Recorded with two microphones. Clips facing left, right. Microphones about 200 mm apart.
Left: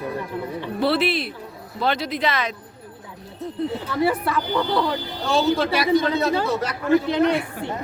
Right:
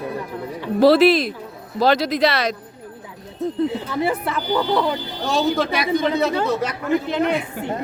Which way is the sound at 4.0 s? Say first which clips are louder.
Left 2 dB; 25° right (ahead or behind).